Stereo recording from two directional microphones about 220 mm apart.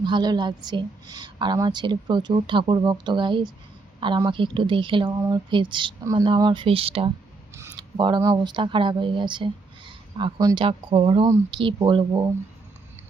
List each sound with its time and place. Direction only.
0.0 s a woman's voice: 20° right (ahead or behind)